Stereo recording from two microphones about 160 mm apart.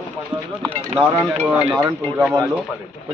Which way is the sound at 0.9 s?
15° right (ahead or behind).